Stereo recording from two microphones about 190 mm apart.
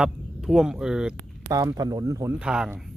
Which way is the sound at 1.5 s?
20° right (ahead or behind).